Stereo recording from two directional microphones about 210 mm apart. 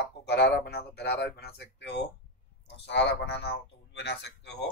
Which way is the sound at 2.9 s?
55° left (ahead or behind).